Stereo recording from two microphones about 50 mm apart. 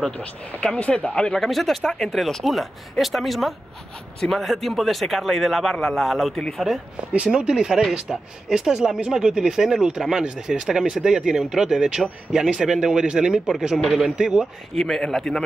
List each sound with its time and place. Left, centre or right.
0.7 s speech: left
1.4 s speech: centre
7.3 s speech: centre
14.8 s a man's voice: centre